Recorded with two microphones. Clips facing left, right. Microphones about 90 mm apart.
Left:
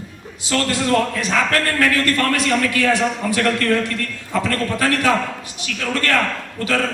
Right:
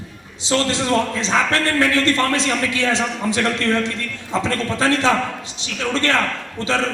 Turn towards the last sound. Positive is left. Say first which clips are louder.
# even
turn(degrees=-25)  # may be behind; listen again after turning